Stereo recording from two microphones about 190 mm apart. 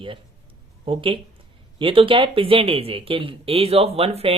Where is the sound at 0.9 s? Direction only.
30° right (ahead or behind).